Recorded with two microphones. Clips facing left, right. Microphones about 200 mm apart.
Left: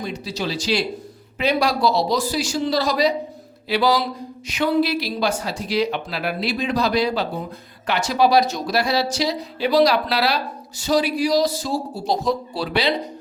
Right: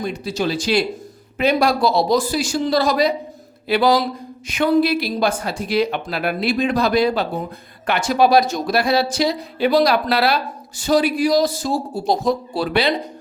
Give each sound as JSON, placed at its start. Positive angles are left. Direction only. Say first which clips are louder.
{"t": 0.0, "sound": "speech", "louder": "right 4 dB", "side_deg": -50}